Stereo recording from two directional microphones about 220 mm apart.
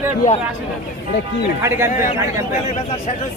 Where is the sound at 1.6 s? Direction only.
10° right (ahead or behind).